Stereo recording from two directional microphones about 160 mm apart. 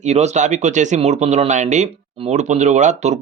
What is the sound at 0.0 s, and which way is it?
Speech, 45° right (ahead or behind).